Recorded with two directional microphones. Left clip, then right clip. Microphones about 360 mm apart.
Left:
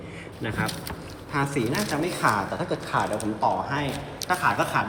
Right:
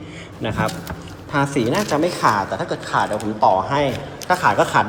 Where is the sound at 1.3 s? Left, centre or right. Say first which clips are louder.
Right 7 dB; centre.